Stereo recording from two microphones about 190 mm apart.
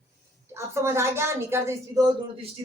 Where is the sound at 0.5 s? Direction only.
15° right (ahead or behind).